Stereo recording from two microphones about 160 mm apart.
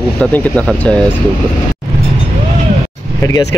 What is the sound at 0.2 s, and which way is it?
Speech, 10° left (ahead or behind).